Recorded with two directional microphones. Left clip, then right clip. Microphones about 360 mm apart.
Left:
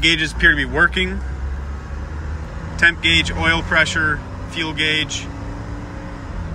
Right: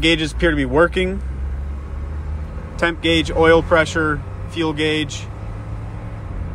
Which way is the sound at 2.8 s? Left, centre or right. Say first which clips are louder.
Left 3 dB; centre.